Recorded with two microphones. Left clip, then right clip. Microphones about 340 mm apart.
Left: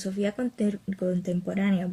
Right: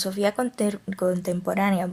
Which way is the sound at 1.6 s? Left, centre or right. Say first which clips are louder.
Right 7 dB; centre.